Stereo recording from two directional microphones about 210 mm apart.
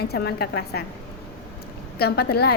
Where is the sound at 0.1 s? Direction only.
50° left (ahead or behind).